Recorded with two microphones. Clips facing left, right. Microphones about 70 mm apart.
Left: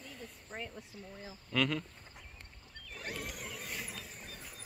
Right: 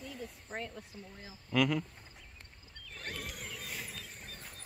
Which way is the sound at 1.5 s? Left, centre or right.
Centre.